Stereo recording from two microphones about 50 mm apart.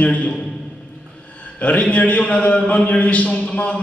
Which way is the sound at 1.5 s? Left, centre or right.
Left.